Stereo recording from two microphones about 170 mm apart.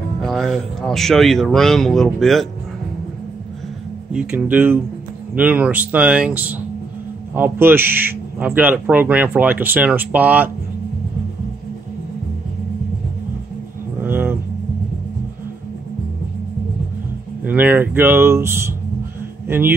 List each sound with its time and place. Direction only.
0.2 s speech: centre (ahead or behind)
4.1 s speech: 5° right (ahead or behind)
14.0 s music: 10° right (ahead or behind)
17.5 s speech: 10° right (ahead or behind)